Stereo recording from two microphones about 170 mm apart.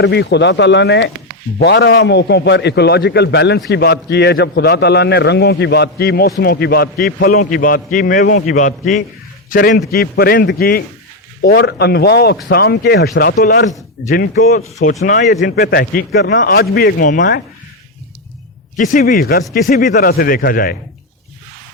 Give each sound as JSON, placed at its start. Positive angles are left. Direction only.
{"t": 0.0, "sound": "a man's voice", "side_deg": 80}
{"t": 15.0, "sound": "a man's voice", "side_deg": 50}
{"t": 18.8, "sound": "a man's voice", "side_deg": 50}